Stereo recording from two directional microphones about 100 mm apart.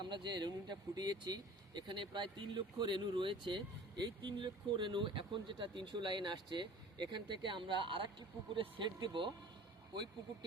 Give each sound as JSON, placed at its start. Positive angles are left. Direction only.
{"t": 0.0, "sound": "speech", "side_deg": -50}